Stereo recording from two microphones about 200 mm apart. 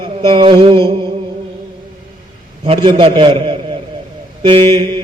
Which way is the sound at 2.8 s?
25° right (ahead or behind).